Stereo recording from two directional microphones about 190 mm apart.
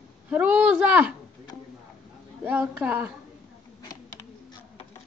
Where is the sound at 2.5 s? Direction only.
10° right (ahead or behind).